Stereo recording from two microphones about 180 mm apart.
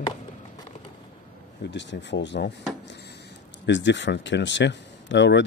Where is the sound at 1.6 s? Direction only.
75° left (ahead or behind).